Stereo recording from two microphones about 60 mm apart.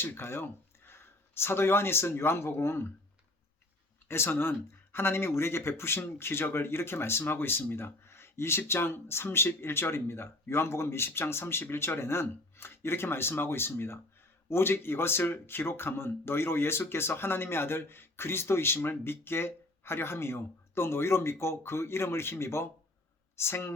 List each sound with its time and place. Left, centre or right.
0.0 s speech: left
4.1 s speech: left